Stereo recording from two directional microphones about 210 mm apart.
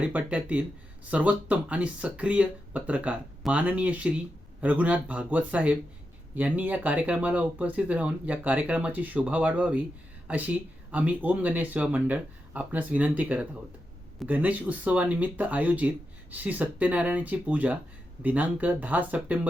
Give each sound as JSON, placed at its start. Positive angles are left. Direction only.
{"t": 0.0, "sound": "speech", "side_deg": -5}